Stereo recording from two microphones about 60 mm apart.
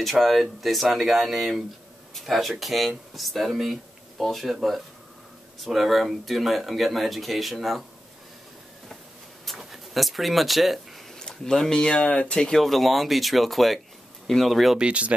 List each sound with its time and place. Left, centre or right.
0.0 s speech: centre
9.5 s speech: centre
11.1 s speech: centre
14.8 s speech: right